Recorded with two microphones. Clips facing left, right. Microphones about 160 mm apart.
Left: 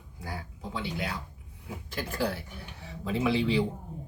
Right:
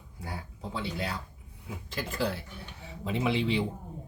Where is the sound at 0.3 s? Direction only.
30° right (ahead or behind).